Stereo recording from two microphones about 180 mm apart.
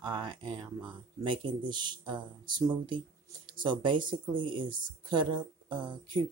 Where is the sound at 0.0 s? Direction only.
25° right (ahead or behind).